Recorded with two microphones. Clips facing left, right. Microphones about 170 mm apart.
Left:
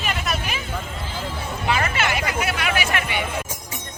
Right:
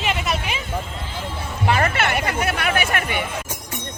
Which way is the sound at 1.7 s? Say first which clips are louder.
Right 3 dB; 50° right (ahead or behind).